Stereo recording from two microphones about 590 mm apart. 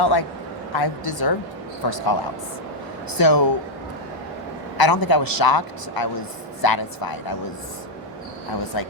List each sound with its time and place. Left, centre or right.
0.0 s a man's voice: left
3.2 s a man's voice: left
4.8 s a man's voice: left
8.7 s a man's voice: left